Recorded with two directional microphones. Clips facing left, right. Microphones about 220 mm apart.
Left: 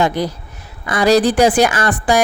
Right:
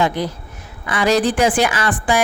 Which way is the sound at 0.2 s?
40° left (ahead or behind).